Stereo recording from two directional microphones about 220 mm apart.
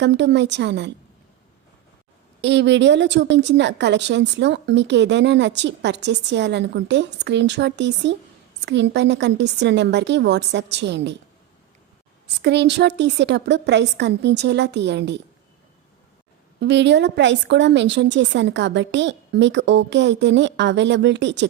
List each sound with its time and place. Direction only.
0.0 s a woman's voice: 50° right (ahead or behind)
2.4 s a woman's voice: 55° right (ahead or behind)
12.4 s a woman's voice: 50° right (ahead or behind)
16.6 s a woman's voice: 50° right (ahead or behind)